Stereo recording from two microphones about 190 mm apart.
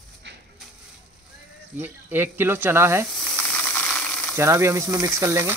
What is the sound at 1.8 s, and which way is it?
Speech, 10° right (ahead or behind).